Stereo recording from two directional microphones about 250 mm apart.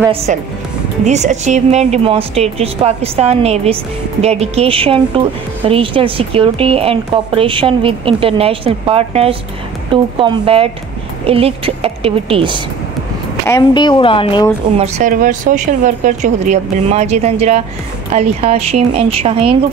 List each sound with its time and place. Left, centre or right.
0.3 s speech: right
13.5 s speech: centre
14.8 s speech: right